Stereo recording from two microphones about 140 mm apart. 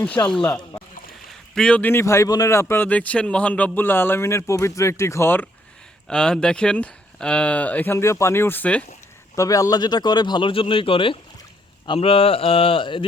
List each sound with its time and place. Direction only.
0.0 s a man's voice: 10° left (ahead or behind)
6.1 s a man's voice: 5° left (ahead or behind)
9.3 s speech: 25° left (ahead or behind)